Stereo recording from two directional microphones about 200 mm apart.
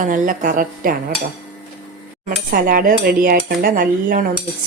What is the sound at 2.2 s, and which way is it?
A woman's voice, 45° right (ahead or behind).